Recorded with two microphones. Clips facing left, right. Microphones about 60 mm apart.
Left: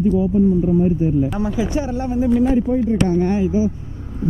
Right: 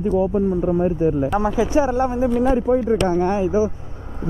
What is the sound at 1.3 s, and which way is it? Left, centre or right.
Speech, right.